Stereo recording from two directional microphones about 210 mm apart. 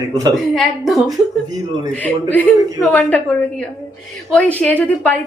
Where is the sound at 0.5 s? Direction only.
Centre (ahead or behind).